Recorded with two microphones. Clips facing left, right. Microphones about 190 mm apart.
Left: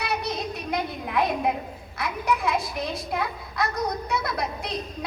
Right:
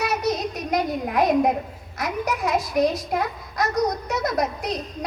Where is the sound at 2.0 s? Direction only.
45° right (ahead or behind).